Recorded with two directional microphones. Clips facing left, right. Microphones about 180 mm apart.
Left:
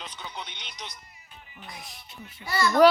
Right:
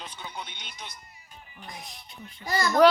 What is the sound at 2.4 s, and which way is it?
Speech, 40° right (ahead or behind).